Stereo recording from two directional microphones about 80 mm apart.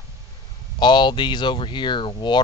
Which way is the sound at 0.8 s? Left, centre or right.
Left.